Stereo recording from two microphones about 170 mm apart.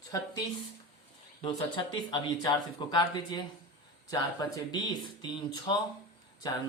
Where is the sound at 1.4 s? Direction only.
25° left (ahead or behind).